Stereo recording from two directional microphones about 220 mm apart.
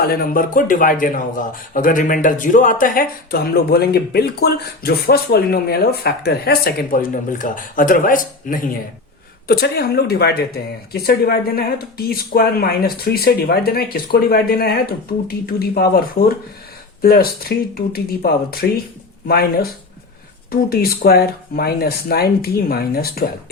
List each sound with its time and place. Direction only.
0.0 s speech: 40° left (ahead or behind)
20.5 s speech: 45° left (ahead or behind)